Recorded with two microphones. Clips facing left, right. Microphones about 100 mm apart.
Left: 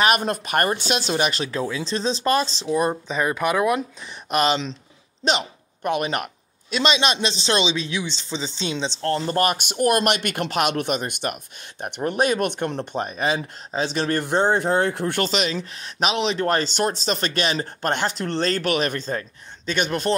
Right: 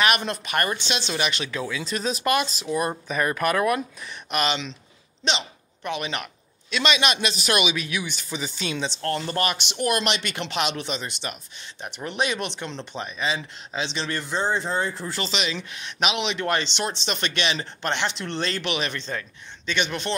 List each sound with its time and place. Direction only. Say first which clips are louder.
0.0 s speech: left 3 dB; 40° left (ahead or behind)
2.9 s speech: left 2 dB; 15° left (ahead or behind)
4.3 s a man's voice: left 5 dB; 35° left (ahead or behind)